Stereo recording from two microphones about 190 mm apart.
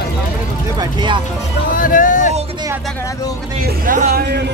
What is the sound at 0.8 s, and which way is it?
Speech, 25° right (ahead or behind).